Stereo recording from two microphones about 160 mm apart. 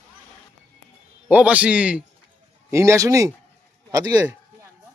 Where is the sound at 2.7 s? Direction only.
20° right (ahead or behind).